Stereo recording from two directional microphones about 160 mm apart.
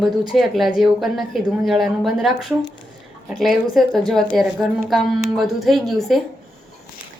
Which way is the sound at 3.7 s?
Centre (ahead or behind).